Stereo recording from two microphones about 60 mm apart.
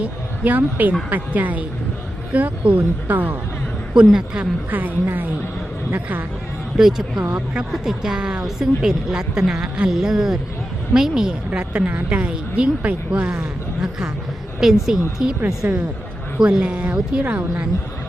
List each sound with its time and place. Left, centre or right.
0.0 s speech: right
4.7 s speech: right
6.7 s a woman's voice: centre
7.3 s speech: right
7.7 s a woman's voice: centre
11.5 s a woman's voice: right
15.6 s speech: right